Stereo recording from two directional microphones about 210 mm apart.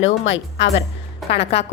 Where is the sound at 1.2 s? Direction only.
Centre (ahead or behind).